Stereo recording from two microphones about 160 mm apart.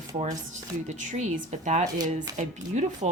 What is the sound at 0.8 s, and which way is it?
A woman's voice, 50° right (ahead or behind).